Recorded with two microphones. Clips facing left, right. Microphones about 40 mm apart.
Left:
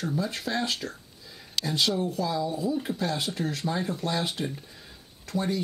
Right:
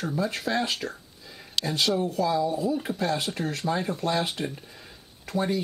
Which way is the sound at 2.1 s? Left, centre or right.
Centre.